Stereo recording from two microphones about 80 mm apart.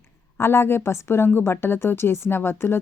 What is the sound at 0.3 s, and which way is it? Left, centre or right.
A woman's voice, left.